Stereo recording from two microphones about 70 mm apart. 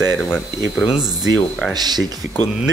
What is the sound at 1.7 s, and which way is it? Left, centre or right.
Speech, right.